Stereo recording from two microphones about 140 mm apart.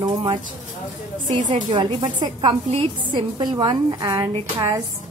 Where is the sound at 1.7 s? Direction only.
35° right (ahead or behind).